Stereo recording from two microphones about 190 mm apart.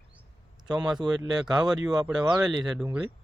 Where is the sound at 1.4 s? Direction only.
Centre (ahead or behind).